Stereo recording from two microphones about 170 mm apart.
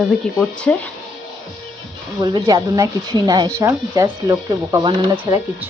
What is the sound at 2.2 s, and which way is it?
Speech, 25° right (ahead or behind).